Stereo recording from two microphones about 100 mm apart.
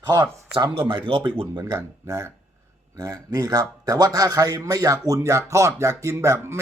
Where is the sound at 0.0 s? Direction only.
45° right (ahead or behind).